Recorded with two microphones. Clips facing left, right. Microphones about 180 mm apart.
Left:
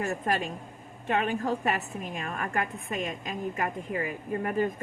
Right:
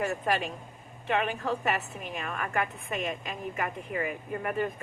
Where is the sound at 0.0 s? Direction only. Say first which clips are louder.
Even; 45° left (ahead or behind).